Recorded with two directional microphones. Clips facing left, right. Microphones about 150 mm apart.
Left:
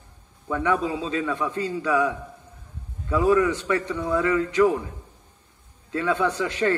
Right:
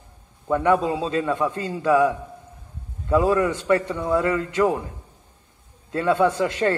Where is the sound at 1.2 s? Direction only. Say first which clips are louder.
Right 2 dB; 30° right (ahead or behind).